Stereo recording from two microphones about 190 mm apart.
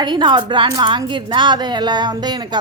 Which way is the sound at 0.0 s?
25° right (ahead or behind).